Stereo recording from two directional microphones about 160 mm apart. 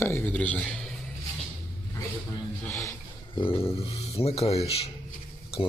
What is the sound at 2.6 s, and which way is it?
Speech, 20° left (ahead or behind).